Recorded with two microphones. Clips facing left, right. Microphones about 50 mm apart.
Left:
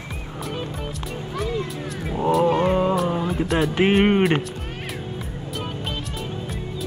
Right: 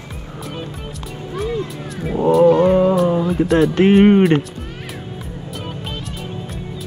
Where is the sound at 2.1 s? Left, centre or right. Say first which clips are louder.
Right 6 dB; centre.